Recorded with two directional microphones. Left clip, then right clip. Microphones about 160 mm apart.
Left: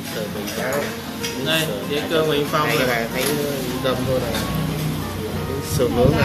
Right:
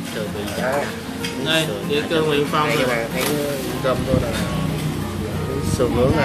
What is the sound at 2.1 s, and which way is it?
Speech, 5° right (ahead or behind).